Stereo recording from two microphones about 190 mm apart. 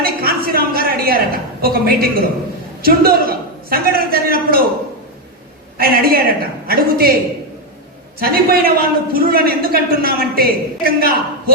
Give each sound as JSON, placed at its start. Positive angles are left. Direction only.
{"t": 0.0, "sound": "a sound", "side_deg": -50}
{"t": 2.8, "sound": "a man's voice", "side_deg": -50}
{"t": 5.7, "sound": "a woman's voice", "side_deg": -50}
{"t": 8.2, "sound": "a man's voice", "side_deg": -50}